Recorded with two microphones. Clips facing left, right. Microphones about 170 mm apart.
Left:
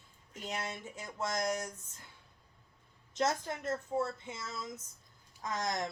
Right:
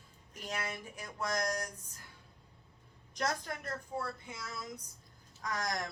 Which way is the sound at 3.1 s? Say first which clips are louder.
Left 3 dB; 25° left (ahead or behind).